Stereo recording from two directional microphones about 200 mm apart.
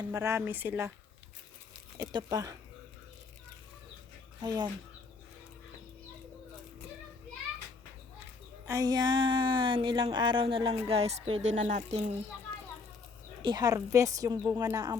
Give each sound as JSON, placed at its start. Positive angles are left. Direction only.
{"t": 0.1, "sound": "a woman's voice", "side_deg": -15}
{"t": 2.0, "sound": "speech", "side_deg": -20}
{"t": 4.4, "sound": "speech", "side_deg": -20}
{"t": 8.6, "sound": "speech", "side_deg": -15}
{"t": 13.4, "sound": "a woman's voice", "side_deg": -20}